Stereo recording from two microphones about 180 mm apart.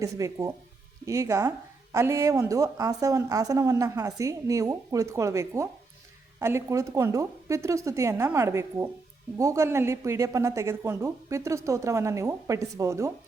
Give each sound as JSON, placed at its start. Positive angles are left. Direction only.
{"t": 0.0, "sound": "speech", "side_deg": -20}